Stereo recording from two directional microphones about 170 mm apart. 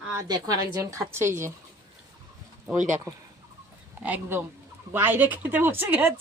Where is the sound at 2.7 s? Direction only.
45° right (ahead or behind).